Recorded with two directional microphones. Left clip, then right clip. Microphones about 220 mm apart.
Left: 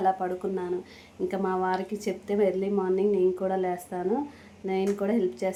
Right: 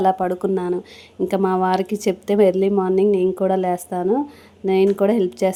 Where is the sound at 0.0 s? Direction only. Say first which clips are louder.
Right 8 dB; 40° right (ahead or behind).